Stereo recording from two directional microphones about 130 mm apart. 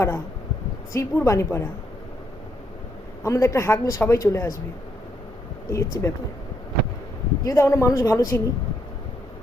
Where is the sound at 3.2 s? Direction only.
25° left (ahead or behind).